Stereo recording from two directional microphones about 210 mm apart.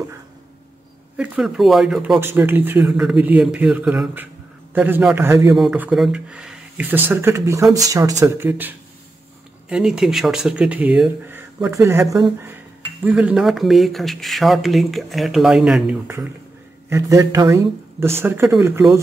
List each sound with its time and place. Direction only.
1.1 s speech: 5° right (ahead or behind)